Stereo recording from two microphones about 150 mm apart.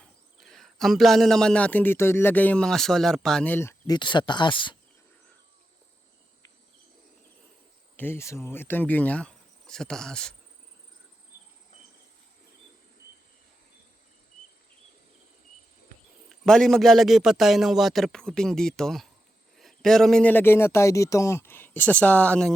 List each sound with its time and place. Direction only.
0.0 s speech: centre (ahead or behind)
3.9 s speech: 30° left (ahead or behind)
7.9 s speech: 15° left (ahead or behind)
16.5 s a man's voice: 5° left (ahead or behind)